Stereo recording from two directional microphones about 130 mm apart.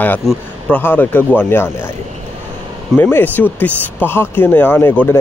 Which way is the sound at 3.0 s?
15° left (ahead or behind).